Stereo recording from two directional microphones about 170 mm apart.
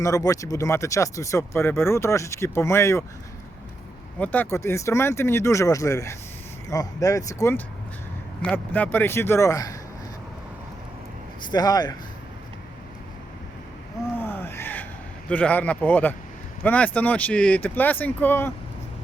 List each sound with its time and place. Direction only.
0.0 s speech: 20° left (ahead or behind)
4.2 s speech: 10° left (ahead or behind)
11.5 s speech: 25° left (ahead or behind)
14.2 s gasp: 10° left (ahead or behind)
15.3 s speech: 10° left (ahead or behind)